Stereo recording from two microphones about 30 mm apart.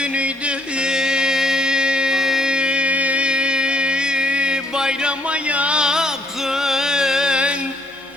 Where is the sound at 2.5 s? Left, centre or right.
Right.